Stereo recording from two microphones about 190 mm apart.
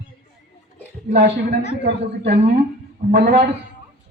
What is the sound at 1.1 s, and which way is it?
Speech, 55° right (ahead or behind).